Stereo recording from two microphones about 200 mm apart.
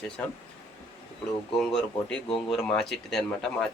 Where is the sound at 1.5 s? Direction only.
Centre (ahead or behind).